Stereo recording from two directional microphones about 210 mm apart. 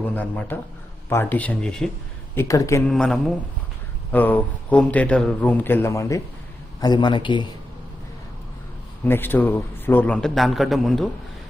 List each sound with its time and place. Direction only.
0.0 s speech: 5° left (ahead or behind)
2.3 s speech: 15° left (ahead or behind)
2.9 s a man's voice: centre (ahead or behind); by 7.4 s 20° left (ahead or behind)
9.0 s a man's voice: 10° left (ahead or behind)